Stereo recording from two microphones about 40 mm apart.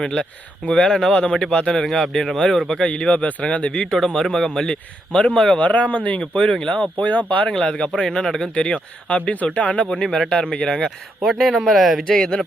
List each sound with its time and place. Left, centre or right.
0.0 s speech: left
2.8 s speech: left
4.1 s speech: centre
4.7 s speech: left
5.5 s speech: left
7.6 s speech: left
8.5 s speech: left
9.8 s speech: centre
10.8 s speech: centre
12.0 s speech: centre